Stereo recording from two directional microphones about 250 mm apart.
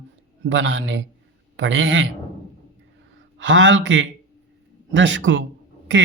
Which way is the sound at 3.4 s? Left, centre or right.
Right.